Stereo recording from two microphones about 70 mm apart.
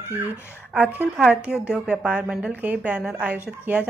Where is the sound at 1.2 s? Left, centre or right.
Centre.